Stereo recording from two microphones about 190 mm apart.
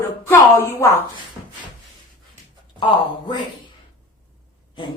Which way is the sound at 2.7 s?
25° left (ahead or behind).